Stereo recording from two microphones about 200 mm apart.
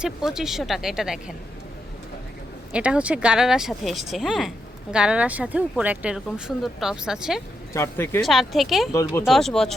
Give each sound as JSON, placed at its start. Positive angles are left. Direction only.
{"t": 0.0, "sound": "speech", "side_deg": 0}
{"t": 2.7, "sound": "speech", "side_deg": -5}
{"t": 7.7, "sound": "speech", "side_deg": 10}
{"t": 8.2, "sound": "speech", "side_deg": 0}
{"t": 8.9, "sound": "speech", "side_deg": 15}
{"t": 9.2, "sound": "speech", "side_deg": 0}